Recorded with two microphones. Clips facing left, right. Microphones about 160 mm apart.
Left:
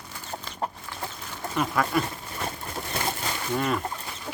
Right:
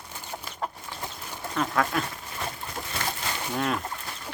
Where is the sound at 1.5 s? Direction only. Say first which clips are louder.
Left 1 dB; 5° left (ahead or behind).